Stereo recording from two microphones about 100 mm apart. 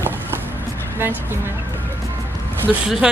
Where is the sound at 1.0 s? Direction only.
20° right (ahead or behind).